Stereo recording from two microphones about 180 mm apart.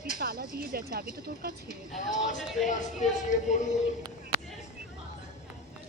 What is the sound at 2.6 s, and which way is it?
Speech, 40° left (ahead or behind).